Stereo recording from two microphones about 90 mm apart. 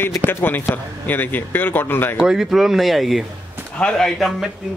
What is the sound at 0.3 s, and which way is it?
A man's voice, 25° left (ahead or behind).